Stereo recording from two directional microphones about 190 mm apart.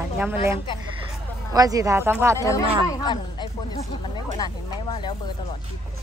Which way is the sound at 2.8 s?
20° left (ahead or behind).